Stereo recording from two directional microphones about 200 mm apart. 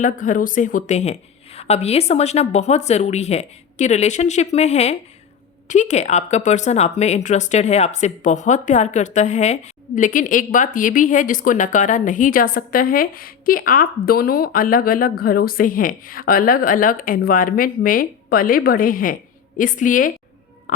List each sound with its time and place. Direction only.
0.0 s speech: 40° left (ahead or behind)
20.7 s music: 40° left (ahead or behind)